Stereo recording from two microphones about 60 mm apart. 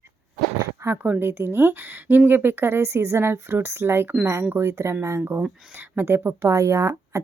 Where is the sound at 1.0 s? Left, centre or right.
Right.